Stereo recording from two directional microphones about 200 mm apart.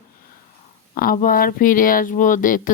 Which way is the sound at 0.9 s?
45° left (ahead or behind).